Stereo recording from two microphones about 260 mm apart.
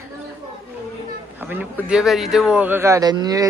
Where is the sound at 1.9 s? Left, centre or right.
Centre.